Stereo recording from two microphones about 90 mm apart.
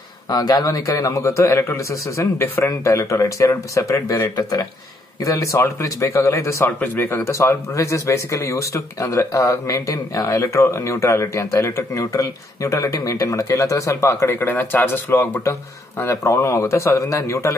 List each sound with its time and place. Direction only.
0.3 s speech: 50° left (ahead or behind); by 17.6 s 35° left (ahead or behind)